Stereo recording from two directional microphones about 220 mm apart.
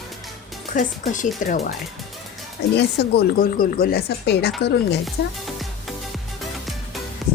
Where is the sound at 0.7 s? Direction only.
35° left (ahead or behind).